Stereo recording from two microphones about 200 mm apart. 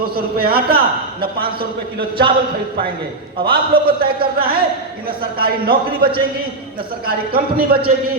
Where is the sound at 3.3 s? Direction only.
50° right (ahead or behind).